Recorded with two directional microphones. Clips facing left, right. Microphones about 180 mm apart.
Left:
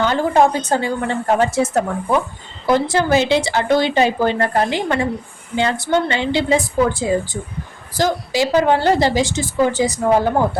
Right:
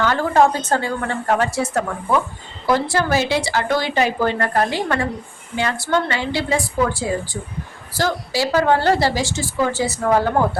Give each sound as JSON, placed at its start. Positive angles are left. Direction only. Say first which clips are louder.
{"t": 0.0, "sound": "a woman's voice", "louder": "left 1 dB", "side_deg": 20}